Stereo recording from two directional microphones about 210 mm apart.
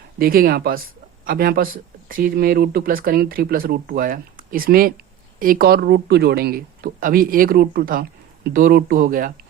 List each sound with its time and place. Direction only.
0.2 s speech: 45° right (ahead or behind)